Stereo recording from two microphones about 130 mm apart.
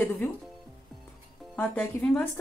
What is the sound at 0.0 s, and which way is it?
Speech, 15° left (ahead or behind).